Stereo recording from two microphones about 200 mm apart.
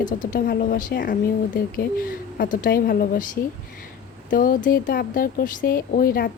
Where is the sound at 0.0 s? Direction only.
40° left (ahead or behind).